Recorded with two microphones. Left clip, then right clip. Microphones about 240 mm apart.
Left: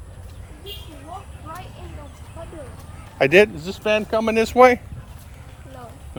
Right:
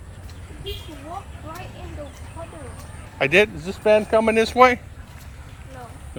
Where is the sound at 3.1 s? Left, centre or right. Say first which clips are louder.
Left 3 dB; left.